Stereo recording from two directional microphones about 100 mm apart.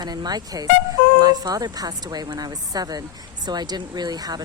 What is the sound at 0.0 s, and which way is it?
Speech, 40° right (ahead or behind).